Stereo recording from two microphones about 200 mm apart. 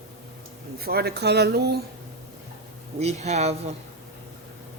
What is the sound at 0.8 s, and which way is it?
Speech, 50° right (ahead or behind).